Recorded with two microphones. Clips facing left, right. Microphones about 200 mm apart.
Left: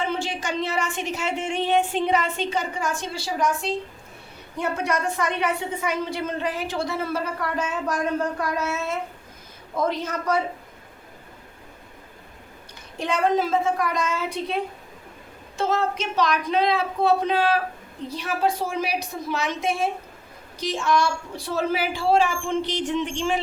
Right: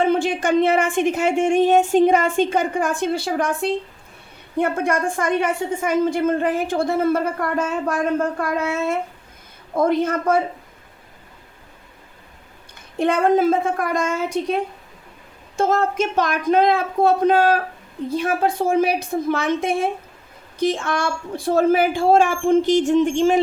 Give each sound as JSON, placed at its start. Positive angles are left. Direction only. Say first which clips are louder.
{"t": 0.0, "sound": "a woman's voice", "louder": "right 9 dB", "side_deg": -55}
{"t": 13.0, "sound": "a woman's voice", "louder": "right 6 dB", "side_deg": -55}